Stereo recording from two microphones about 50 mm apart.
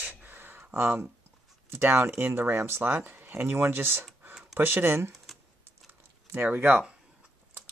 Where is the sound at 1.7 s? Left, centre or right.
Right.